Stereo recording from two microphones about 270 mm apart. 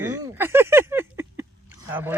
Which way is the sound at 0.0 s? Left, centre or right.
Centre.